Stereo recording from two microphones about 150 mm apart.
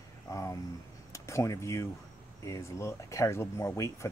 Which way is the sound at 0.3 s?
20° left (ahead or behind).